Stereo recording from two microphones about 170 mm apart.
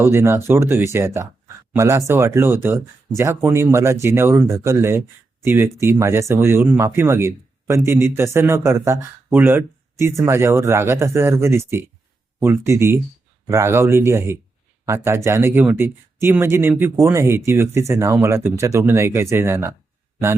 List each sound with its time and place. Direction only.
0.0 s speech: 15° right (ahead or behind)